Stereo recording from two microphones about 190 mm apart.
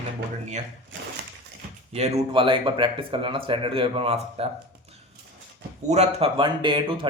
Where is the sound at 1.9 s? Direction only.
35° right (ahead or behind).